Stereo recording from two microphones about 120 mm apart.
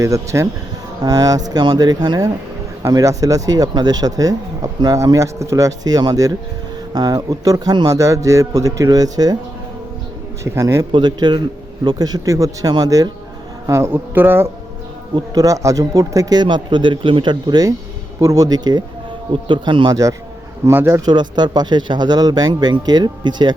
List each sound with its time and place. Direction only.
0.0 s speech: 25° right (ahead or behind)
10.4 s speech: 25° right (ahead or behind)
10.9 s speech: 40° right (ahead or behind); by 14.5 s 20° right (ahead or behind)
15.1 s speech: 30° right (ahead or behind)
21.0 s speech: 35° right (ahead or behind)